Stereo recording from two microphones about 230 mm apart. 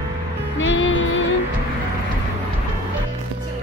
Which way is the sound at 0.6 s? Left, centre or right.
Left.